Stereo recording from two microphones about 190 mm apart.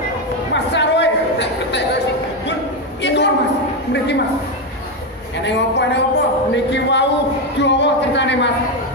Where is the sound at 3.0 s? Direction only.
65° left (ahead or behind).